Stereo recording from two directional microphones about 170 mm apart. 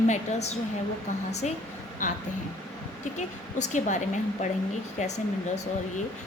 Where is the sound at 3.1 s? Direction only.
45° left (ahead or behind).